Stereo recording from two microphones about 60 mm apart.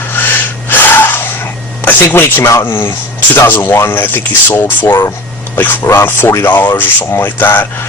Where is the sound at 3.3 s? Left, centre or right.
Left.